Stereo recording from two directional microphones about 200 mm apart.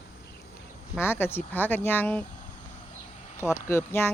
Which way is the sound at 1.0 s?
10° left (ahead or behind).